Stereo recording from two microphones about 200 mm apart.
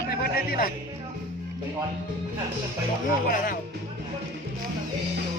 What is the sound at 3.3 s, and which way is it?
Speech, 45° left (ahead or behind).